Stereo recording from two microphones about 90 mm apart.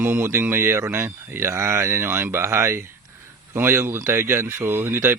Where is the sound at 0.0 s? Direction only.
25° right (ahead or behind).